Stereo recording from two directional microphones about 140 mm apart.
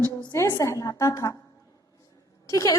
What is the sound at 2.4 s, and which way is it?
Speech, 25° left (ahead or behind).